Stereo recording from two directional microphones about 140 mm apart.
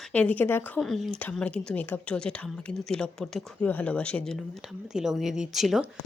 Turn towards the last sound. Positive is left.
turn(degrees=0)  # may be behind; listen again after turning